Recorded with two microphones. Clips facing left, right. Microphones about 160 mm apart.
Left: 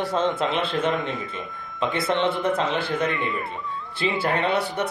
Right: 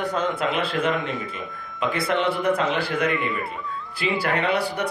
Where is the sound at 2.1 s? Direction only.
25° left (ahead or behind).